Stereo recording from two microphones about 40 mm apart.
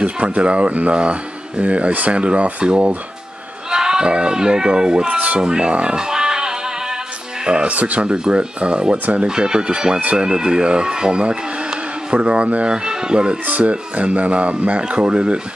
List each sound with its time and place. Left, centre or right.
0.0 s speech: right
5.0 s speech: right
5.4 s music: right
7.4 s speech: right
8.1 s speech: right
8.9 s speech: right
9.3 s speech: centre
12.6 s speech: right
13.5 s speech: right